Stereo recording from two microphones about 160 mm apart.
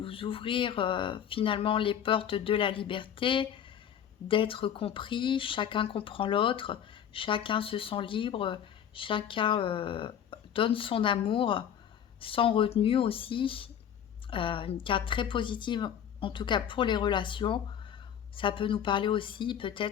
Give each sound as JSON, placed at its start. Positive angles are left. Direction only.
{"t": 0.0, "sound": "speech", "side_deg": 35}